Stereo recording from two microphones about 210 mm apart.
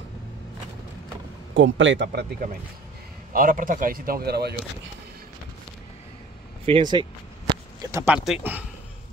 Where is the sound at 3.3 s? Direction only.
40° right (ahead or behind).